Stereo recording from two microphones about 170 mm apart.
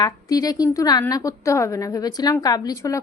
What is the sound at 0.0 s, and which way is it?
A woman's voice, 20° left (ahead or behind).